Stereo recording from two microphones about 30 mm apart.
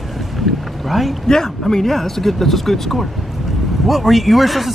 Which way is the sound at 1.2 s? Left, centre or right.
Centre.